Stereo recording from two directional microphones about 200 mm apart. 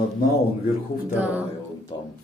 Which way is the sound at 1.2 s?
5° right (ahead or behind).